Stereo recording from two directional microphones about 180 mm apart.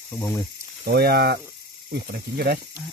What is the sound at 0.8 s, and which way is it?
Speech, 60° right (ahead or behind).